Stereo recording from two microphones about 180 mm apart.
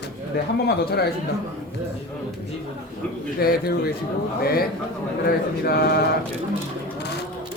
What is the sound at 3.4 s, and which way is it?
A man's voice, 55° left (ahead or behind).